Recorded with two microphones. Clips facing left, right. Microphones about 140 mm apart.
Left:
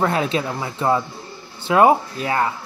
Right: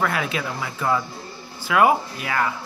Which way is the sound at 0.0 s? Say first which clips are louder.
Left 4 dB; 30° left (ahead or behind).